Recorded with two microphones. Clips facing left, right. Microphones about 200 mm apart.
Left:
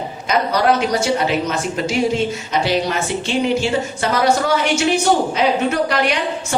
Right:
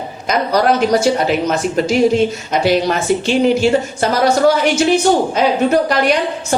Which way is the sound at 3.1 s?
45° right (ahead or behind).